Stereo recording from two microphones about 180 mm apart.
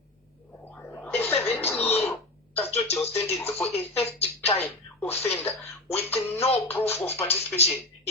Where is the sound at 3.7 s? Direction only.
35° left (ahead or behind).